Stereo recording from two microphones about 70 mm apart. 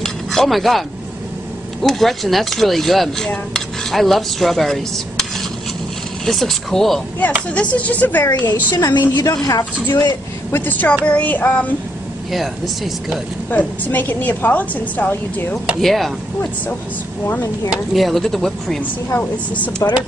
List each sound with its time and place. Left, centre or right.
0.0 s speech: centre
1.8 s dishes: centre
6.2 s dishes: centre
7.5 s a woman's voice: centre
8.7 s a woman's voice: left
9.1 s a woman's voice: left
10.5 s a woman's voice: left
12.3 s dishes: centre
13.5 s a woman's voice: left
15.8 s dishes: centre
17.6 s dishes: centre
19.8 s a woman's voice: left